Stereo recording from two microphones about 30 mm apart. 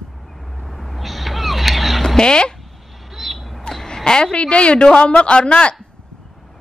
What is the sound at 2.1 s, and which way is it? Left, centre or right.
Speech, left.